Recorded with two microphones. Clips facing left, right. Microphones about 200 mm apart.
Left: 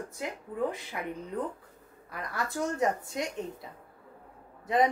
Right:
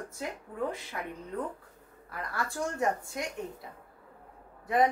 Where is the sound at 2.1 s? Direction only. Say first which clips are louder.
Left 1 dB; 20° left (ahead or behind).